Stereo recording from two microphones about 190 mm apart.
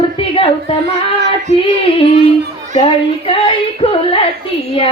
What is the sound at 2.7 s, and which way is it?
Female singing, 30° left (ahead or behind).